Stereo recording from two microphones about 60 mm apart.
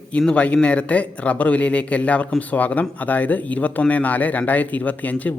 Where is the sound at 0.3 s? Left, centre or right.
Left.